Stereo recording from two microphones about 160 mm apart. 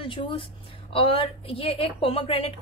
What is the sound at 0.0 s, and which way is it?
A woman's voice, 35° left (ahead or behind).